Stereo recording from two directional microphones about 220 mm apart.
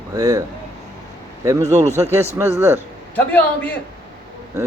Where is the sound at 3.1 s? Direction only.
5° left (ahead or behind).